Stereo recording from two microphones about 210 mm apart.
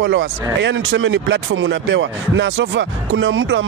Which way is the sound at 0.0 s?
60° right (ahead or behind).